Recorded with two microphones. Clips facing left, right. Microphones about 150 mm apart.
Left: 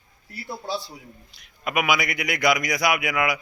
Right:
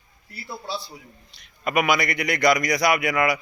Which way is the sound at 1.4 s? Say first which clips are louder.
Right 3 dB; 5° left (ahead or behind).